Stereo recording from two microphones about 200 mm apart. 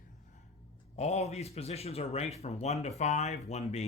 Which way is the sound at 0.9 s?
35° left (ahead or behind).